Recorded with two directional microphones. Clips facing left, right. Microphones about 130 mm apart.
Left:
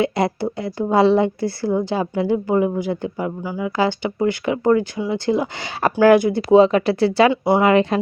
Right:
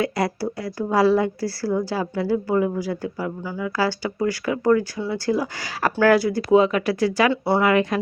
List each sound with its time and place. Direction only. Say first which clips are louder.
0.0 s speech: left 3 dB; 25° left (ahead or behind)